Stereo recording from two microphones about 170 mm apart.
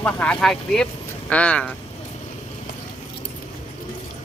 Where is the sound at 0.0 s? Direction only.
5° left (ahead or behind).